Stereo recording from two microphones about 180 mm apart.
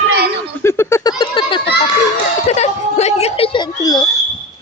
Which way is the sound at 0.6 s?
15° left (ahead or behind).